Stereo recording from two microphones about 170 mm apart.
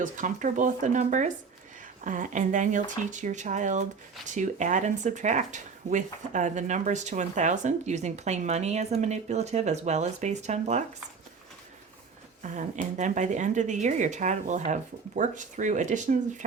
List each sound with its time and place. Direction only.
0.0 s speech: 50° right (ahead or behind)
12.4 s speech: 45° right (ahead or behind)